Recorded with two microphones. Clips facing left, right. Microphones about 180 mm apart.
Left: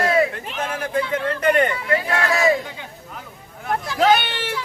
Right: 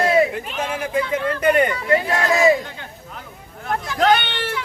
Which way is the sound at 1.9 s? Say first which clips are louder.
Right 2 dB; 30° right (ahead or behind).